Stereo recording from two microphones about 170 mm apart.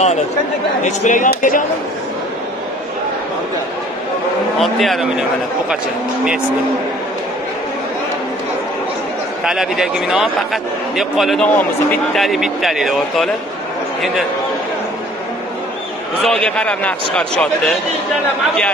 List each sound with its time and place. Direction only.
0.8 s speech: 45° left (ahead or behind)
4.6 s a man's voice: centre (ahead or behind)
9.4 s a man's voice: 5° right (ahead or behind)
16.2 s a man's voice: 5° left (ahead or behind)